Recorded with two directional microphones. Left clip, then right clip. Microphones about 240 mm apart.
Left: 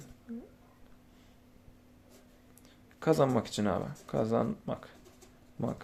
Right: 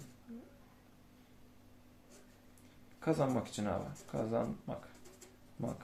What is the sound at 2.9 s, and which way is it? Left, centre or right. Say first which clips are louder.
Speech: left 7 dB; left.